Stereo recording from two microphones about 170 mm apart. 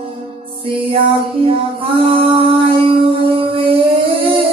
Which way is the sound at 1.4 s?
35° right (ahead or behind).